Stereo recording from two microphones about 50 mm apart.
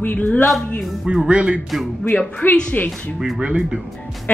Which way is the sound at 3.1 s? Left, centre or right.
Centre.